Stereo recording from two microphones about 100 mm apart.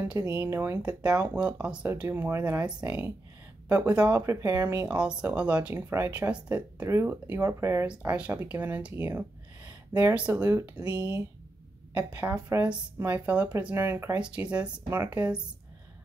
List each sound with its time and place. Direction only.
0.0 s speech: 15° right (ahead or behind)
4.3 s speech: 25° right (ahead or behind)
4.9 s speech: 10° right (ahead or behind)
5.9 s speech: 25° right (ahead or behind)
7.8 s speech: 10° right (ahead or behind)
11.9 s speech: 15° right (ahead or behind)